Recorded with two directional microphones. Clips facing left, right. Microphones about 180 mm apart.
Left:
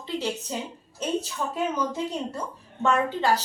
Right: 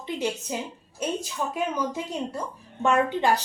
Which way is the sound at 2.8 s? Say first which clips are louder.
Right 1 dB; 15° right (ahead or behind).